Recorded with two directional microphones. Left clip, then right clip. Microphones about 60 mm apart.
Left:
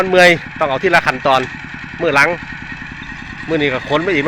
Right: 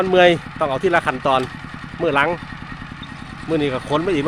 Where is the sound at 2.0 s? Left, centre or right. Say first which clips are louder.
Left 4 dB; right.